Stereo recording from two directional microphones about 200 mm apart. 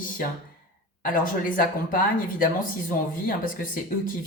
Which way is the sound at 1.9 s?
45° left (ahead or behind).